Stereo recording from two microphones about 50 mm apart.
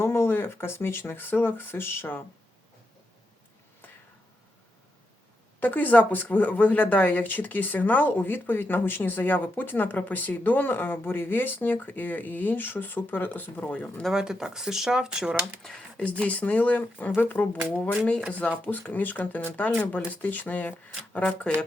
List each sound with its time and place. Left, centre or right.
0.0 s speech: left
5.5 s speech: left
13.6 s speech: left
14.1 s speech: centre
15.6 s speech: centre
16.2 s speech: left